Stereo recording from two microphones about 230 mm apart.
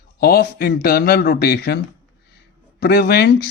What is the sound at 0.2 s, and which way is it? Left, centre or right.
Speech, left.